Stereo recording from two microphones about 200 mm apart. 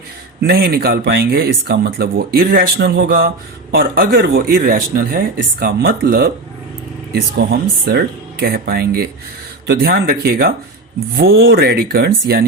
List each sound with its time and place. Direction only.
0.4 s speech: 50° right (ahead or behind)